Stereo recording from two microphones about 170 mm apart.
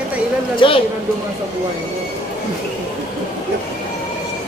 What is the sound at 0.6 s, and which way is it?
Speech, 30° left (ahead or behind).